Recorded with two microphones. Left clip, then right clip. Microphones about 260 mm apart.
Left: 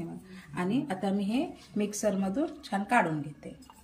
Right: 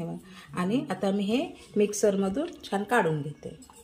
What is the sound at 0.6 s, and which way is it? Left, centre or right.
Speech, centre.